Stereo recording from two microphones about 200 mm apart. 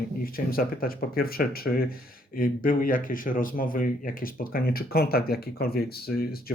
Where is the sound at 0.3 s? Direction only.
45° left (ahead or behind).